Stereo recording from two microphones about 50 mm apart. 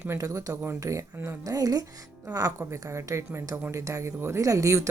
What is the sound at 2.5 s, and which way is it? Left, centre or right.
A woman's voice, right.